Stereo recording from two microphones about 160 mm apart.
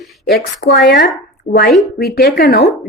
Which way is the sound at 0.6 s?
65° left (ahead or behind).